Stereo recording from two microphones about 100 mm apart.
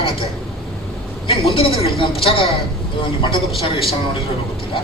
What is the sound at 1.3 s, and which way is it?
Speech, 65° left (ahead or behind).